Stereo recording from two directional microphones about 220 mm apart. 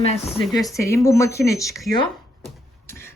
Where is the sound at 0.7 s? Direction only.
15° left (ahead or behind).